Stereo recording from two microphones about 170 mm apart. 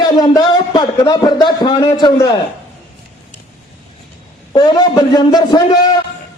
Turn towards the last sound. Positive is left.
turn(degrees=25)  # may be behind; listen again after turning